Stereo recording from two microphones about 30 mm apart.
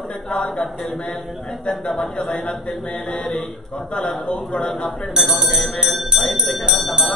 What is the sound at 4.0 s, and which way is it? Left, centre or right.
Speech, left.